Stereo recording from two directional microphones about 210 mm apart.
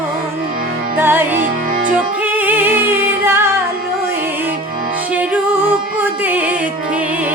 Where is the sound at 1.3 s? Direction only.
40° right (ahead or behind).